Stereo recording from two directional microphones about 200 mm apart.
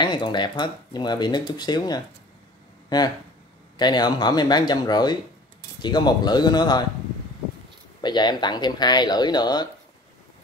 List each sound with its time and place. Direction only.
0.0 s speech: 20° left (ahead or behind)
3.7 s speech: 20° left (ahead or behind)
8.0 s speech: 20° left (ahead or behind)